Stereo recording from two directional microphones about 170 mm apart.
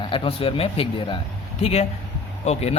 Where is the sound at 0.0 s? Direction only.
30° left (ahead or behind).